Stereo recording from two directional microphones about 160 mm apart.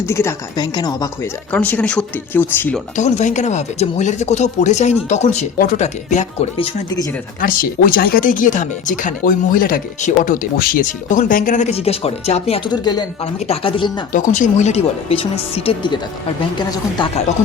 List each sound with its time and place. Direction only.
0.0 s speech: 15° left (ahead or behind)
1.5 s speech: 10° left (ahead or behind)
2.9 s speech: 50° left (ahead or behind)
7.4 s speech: 60° left (ahead or behind); by 12.6 s 40° left (ahead or behind)
12.7 s speech: 25° left (ahead or behind)
14.1 s speech: 50° left (ahead or behind); by 16.0 s 35° left (ahead or behind)